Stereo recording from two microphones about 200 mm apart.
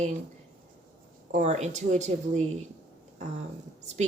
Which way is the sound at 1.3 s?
35° right (ahead or behind).